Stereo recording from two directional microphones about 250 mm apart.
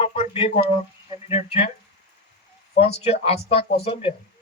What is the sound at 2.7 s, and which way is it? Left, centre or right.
Speech, left.